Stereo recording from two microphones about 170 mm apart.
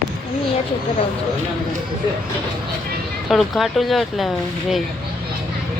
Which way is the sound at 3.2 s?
Centre (ahead or behind).